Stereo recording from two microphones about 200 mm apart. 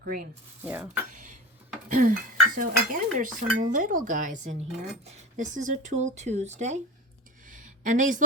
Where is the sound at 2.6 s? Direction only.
40° right (ahead or behind).